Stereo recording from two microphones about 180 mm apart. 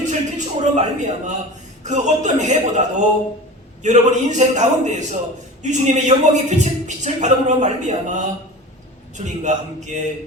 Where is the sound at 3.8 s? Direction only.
40° right (ahead or behind).